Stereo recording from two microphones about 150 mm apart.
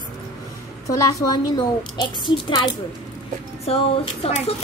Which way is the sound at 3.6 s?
40° left (ahead or behind).